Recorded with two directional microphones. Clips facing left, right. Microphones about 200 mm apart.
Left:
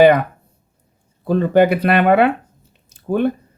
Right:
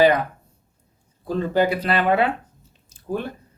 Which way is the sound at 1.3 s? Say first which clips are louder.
Left 7 dB; 60° left (ahead or behind).